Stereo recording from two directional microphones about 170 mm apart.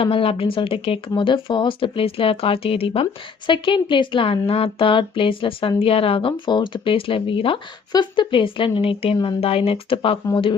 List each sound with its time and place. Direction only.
0.0 s speech: 35° left (ahead or behind)